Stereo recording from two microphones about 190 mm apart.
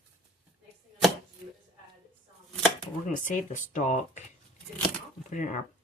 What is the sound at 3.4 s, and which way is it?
Speech, 40° left (ahead or behind).